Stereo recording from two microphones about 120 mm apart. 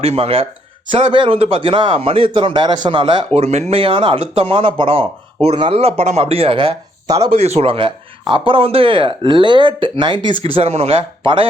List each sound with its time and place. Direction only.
0.0 s speech: 55° right (ahead or behind)
3.3 s speech: 60° right (ahead or behind)
5.7 s speech: 60° right (ahead or behind)
7.3 s speech: 60° right (ahead or behind)